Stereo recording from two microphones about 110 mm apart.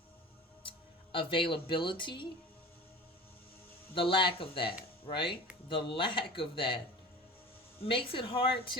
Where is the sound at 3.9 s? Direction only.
50° left (ahead or behind).